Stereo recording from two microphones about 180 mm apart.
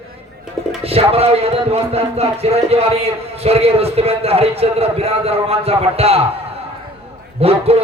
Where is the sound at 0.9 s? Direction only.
35° right (ahead or behind).